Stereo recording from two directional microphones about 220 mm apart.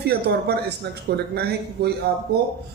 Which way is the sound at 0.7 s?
50° right (ahead or behind).